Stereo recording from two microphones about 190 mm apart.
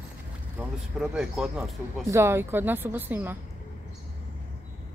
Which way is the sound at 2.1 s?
15° right (ahead or behind).